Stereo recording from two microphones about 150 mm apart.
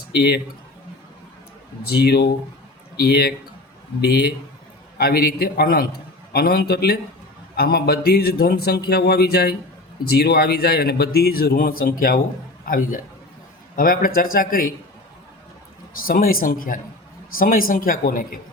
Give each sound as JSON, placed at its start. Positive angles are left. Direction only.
{"t": 0.1, "sound": "a man's voice", "side_deg": 90}
{"t": 1.9, "sound": "a man's voice", "side_deg": 90}
{"t": 12.6, "sound": "speech", "side_deg": 70}
{"t": 16.0, "sound": "speech", "side_deg": 75}